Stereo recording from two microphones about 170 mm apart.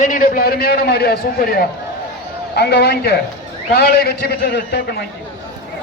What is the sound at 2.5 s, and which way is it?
A man's voice, 75° left (ahead or behind).